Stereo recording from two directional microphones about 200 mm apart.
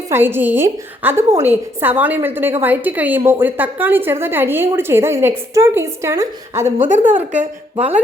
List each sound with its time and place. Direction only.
0.1 s a woman's voice: 10° right (ahead or behind)
6.9 s speech: 40° right (ahead or behind)